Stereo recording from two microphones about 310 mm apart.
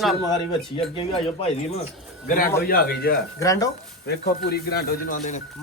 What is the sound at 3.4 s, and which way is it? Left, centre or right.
Speech, centre.